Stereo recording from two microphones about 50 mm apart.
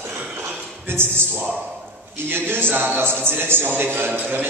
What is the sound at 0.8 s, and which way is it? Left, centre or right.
A man's voice, right.